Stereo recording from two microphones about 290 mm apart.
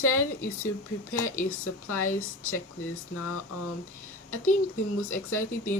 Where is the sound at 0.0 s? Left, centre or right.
Left.